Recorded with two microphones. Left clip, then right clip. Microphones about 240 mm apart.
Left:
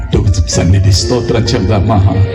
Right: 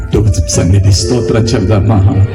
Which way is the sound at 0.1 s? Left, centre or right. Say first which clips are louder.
Right 2 dB; right.